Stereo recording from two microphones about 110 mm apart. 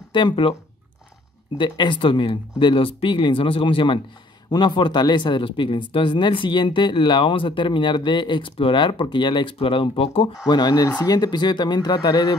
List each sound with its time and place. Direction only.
0.1 s speech: 50° left (ahead or behind)
1.6 s speech: 45° left (ahead or behind)
10.4 s speech: 40° left (ahead or behind)